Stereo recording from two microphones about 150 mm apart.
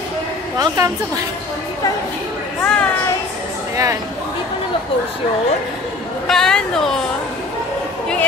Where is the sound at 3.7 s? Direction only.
20° right (ahead or behind).